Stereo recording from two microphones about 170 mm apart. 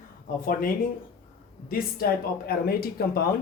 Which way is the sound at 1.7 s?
60° left (ahead or behind).